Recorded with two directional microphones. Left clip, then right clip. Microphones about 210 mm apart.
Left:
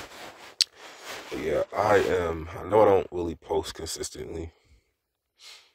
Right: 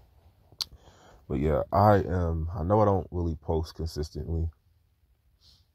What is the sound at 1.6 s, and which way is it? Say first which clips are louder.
Speech: even; 20° left (ahead or behind).